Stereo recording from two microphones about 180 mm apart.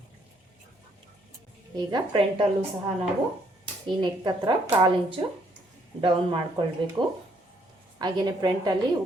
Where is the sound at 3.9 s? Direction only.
25° right (ahead or behind).